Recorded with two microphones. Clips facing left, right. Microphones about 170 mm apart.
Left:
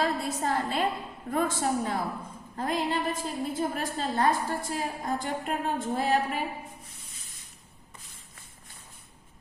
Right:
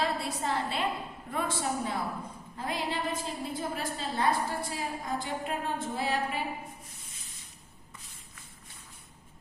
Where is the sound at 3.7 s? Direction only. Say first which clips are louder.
Left 4 dB; 45° left (ahead or behind).